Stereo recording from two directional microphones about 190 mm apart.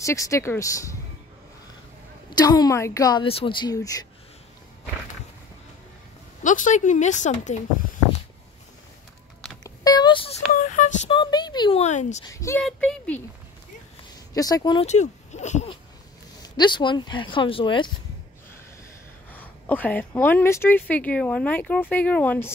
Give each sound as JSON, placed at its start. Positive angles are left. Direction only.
{"t": 0.0, "sound": "speech", "side_deg": 15}
{"t": 2.3, "sound": "a woman's voice", "side_deg": 20}
{"t": 6.4, "sound": "speech", "side_deg": 40}
{"t": 9.6, "sound": "a sound", "side_deg": 20}
{"t": 10.5, "sound": "a sound", "side_deg": 45}
{"t": 11.1, "sound": "a woman's voice", "side_deg": 25}
{"t": 11.8, "sound": "speech", "side_deg": 40}
{"t": 12.3, "sound": "speech", "side_deg": 15}
{"t": 12.6, "sound": "speech", "side_deg": 5}
{"t": 14.3, "sound": "a woman's voice", "side_deg": 20}
{"t": 14.9, "sound": "speech", "side_deg": 40}
{"t": 16.4, "sound": "a woman's voice", "side_deg": 25}
{"t": 19.3, "sound": "speech", "side_deg": 10}